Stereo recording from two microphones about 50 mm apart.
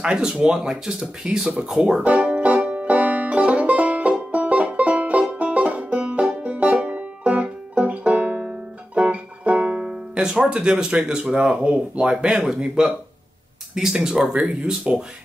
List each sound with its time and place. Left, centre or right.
0.0 s speech: centre
2.0 s music: right
12.3 s speech: centre